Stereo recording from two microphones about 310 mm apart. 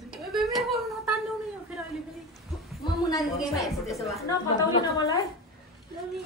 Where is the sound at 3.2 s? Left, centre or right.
Centre.